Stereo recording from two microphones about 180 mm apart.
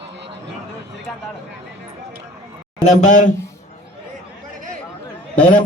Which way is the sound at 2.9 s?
40° left (ahead or behind).